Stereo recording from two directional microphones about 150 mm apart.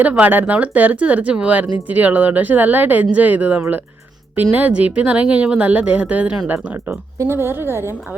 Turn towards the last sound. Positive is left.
turn(degrees=-15)  # may be behind; listen again after turning